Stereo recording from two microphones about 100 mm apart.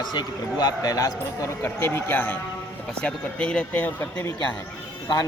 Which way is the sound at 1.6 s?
25° left (ahead or behind).